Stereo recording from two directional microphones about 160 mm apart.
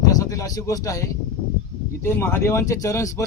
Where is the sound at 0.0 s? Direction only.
20° left (ahead or behind).